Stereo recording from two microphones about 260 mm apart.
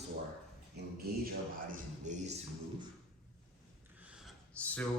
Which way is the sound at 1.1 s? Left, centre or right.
Right.